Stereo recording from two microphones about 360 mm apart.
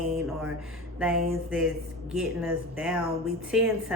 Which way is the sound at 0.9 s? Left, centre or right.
Centre.